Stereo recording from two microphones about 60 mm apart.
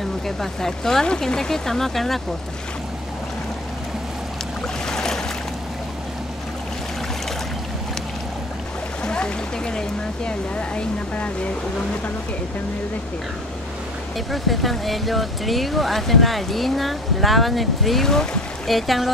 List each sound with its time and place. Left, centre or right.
0.4 s speech: centre
4.8 s boat: centre
9.0 s speech: centre
14.1 s speech: centre